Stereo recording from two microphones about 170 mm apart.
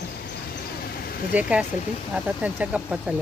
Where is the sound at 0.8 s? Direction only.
60° left (ahead or behind).